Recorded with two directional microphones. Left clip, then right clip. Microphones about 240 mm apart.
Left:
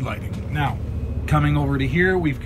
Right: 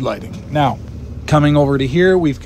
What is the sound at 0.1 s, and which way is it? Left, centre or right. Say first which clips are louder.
Speech: right 9 dB; right.